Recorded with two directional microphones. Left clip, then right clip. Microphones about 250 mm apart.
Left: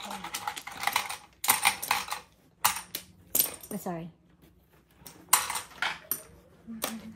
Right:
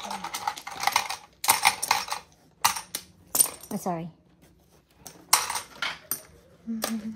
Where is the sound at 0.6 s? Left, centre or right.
Right.